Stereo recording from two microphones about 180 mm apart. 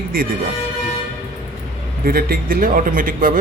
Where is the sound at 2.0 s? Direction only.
55° right (ahead or behind).